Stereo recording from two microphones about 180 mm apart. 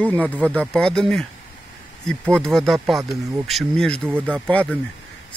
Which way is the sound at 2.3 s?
Centre (ahead or behind).